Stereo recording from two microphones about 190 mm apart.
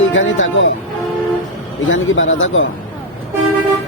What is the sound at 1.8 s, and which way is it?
Speech, 90° left.